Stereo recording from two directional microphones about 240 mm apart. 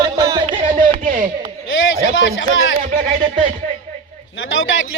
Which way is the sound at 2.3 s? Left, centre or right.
Left.